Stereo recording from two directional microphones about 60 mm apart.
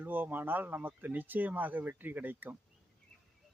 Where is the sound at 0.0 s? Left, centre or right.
Right.